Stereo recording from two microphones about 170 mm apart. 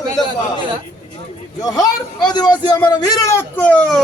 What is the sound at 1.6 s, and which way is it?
A man's voice, 25° left (ahead or behind).